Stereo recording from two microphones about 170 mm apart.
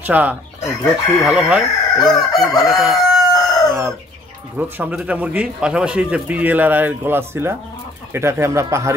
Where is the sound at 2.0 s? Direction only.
Centre (ahead or behind).